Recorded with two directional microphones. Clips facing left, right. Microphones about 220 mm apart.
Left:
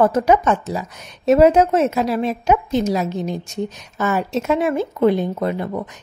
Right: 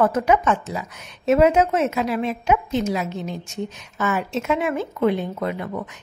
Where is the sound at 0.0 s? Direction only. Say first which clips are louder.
Left 3 dB; 35° left (ahead or behind).